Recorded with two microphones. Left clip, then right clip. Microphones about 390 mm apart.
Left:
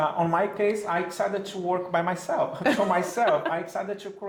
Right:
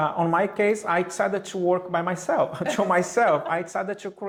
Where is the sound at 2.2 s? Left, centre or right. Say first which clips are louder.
Right 3 dB; right.